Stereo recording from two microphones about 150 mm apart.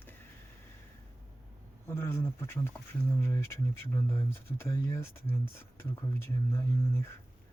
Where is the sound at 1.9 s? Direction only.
15° left (ahead or behind).